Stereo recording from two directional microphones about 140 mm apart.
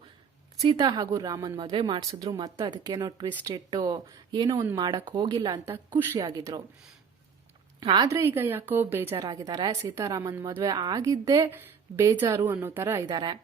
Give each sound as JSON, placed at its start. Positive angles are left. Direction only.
{"t": 0.8, "sound": "a woman's voice", "side_deg": -30}
{"t": 7.9, "sound": "a woman's voice", "side_deg": -20}
{"t": 13.1, "sound": "a woman's voice", "side_deg": -30}